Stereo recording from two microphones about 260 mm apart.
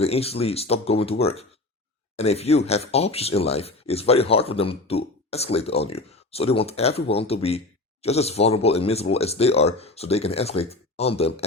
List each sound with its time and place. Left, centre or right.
0.0 s speech: left